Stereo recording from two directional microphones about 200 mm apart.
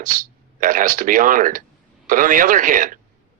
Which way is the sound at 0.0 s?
40° right (ahead or behind).